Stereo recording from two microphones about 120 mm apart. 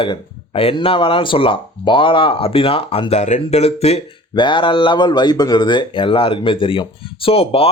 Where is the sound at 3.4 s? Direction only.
60° left (ahead or behind).